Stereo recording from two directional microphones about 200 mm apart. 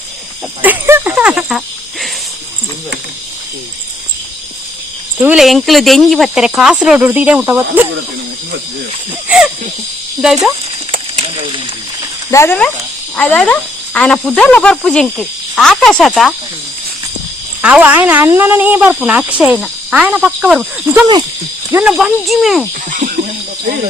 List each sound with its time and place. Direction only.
0.6 s speech: 10° right (ahead or behind)
5.1 s speech: 5° right (ahead or behind)
12.3 s speech: 10° left (ahead or behind)
17.6 s speech: 5° right (ahead or behind)
22.9 s speech: 45° right (ahead or behind)